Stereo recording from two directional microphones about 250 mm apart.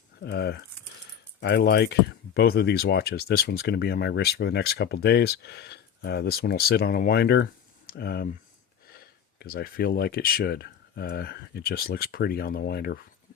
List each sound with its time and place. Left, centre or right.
0.2 s speech: left